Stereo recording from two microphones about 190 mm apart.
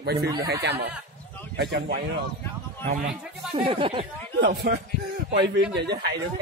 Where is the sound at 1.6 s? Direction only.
60° right (ahead or behind).